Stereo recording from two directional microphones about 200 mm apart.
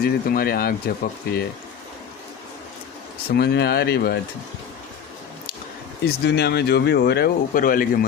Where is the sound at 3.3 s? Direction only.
55° left (ahead or behind).